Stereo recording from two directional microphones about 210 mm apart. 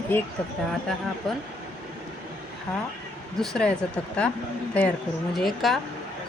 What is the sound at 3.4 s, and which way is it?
Speech, 5° left (ahead or behind).